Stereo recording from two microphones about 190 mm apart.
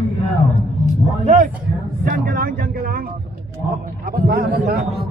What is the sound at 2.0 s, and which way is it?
A man's voice, 50° right (ahead or behind).